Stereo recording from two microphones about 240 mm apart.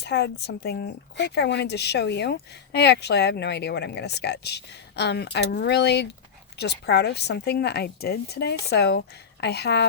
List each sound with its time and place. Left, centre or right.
0.0 s speech: left